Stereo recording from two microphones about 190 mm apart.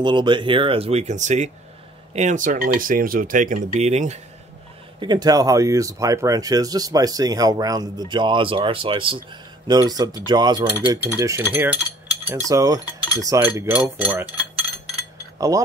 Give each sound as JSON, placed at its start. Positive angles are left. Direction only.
{"t": 0.0, "sound": "speech", "side_deg": -25}
{"t": 5.0, "sound": "speech", "side_deg": -20}
{"t": 10.7, "sound": "cutlery", "side_deg": -10}
{"t": 15.3, "sound": "a sound", "side_deg": -20}